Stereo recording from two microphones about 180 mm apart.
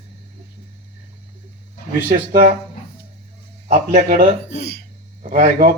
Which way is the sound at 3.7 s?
50° right (ahead or behind).